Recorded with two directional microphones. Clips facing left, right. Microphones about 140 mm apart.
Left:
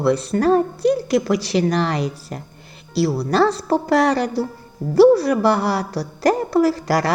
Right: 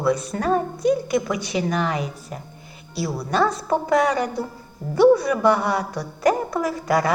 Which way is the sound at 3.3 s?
75° left (ahead or behind).